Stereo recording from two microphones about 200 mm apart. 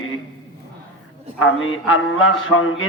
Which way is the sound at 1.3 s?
90° left.